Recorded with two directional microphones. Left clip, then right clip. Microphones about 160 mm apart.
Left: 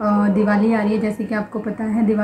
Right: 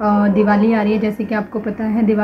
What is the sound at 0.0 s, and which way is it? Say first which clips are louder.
A woman's voice: right 3 dB; 10° right (ahead or behind).